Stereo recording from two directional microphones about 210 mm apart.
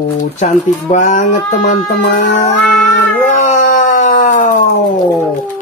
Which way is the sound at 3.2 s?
35° left (ahead or behind).